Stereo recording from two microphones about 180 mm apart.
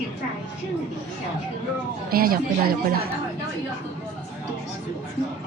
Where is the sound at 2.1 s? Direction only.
55° right (ahead or behind).